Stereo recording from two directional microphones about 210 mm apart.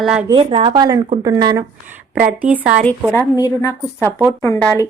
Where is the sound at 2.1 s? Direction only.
5° right (ahead or behind).